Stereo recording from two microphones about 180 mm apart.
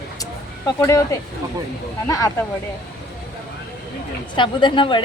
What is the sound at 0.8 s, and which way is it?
A woman's voice, 15° left (ahead or behind).